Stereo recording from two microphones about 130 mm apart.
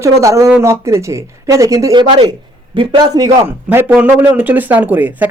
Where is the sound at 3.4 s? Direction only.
15° right (ahead or behind).